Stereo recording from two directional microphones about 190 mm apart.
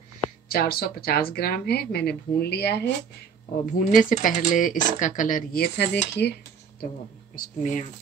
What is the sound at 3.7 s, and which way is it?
Speech, 45° left (ahead or behind).